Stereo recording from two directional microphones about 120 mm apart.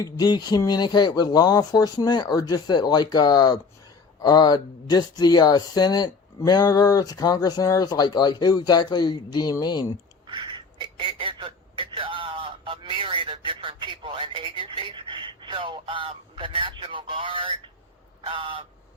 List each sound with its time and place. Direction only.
0.0 s speech: 35° left (ahead or behind)
10.2 s a sound: 45° right (ahead or behind)
18.3 s crow: 45° right (ahead or behind)